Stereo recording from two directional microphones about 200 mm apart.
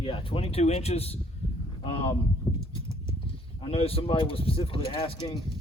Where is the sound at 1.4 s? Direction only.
30° left (ahead or behind).